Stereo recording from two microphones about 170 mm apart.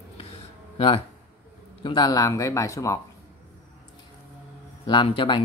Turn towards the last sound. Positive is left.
turn(degrees=30)  # may be behind; listen again after turning